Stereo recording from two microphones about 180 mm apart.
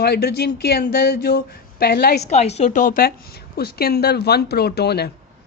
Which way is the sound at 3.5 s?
60° left (ahead or behind).